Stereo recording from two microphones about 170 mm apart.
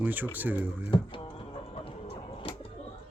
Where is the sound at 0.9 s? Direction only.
30° left (ahead or behind).